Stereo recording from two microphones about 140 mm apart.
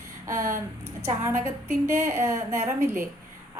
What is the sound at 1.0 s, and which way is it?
A woman's voice, 20° right (ahead or behind).